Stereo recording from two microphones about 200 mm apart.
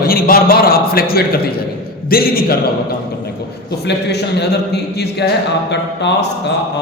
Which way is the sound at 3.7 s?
55° left (ahead or behind).